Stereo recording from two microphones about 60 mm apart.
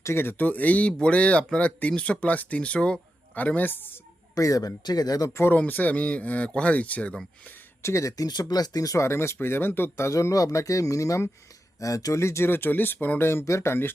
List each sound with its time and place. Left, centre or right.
0.0 s speech: left
0.4 s speech: left
4.4 s speech: left
5.5 s speech: left
7.8 s speech: left
8.1 s speech: left
9.0 s speech: left
10.1 s speech: left